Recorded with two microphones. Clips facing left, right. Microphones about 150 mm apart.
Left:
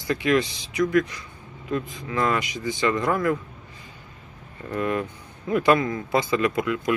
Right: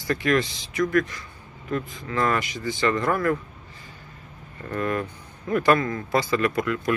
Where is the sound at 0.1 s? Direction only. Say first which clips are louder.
Left 1 dB; 20° left (ahead or behind).